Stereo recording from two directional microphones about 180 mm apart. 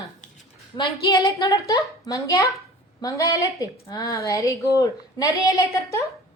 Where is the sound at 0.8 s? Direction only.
25° left (ahead or behind).